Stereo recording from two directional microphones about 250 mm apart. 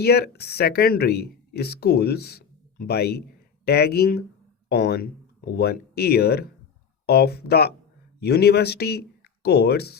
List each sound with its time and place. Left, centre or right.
0.0 s speech: left